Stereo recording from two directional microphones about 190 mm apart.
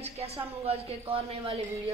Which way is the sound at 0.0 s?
30° right (ahead or behind).